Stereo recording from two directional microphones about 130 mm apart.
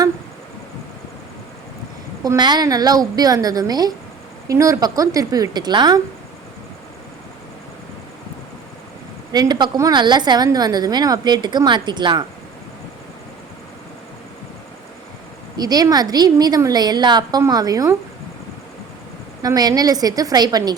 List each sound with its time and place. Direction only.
2.2 s a woman's voice: 30° right (ahead or behind)
9.3 s a woman's voice: 30° right (ahead or behind)
15.5 s a woman's voice: 30° right (ahead or behind)
19.4 s a woman's voice: 30° right (ahead or behind)